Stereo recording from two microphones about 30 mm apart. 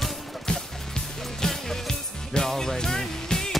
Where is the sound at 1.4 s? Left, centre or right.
Centre.